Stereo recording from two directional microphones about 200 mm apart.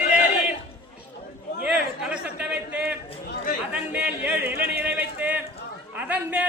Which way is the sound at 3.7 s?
10° right (ahead or behind).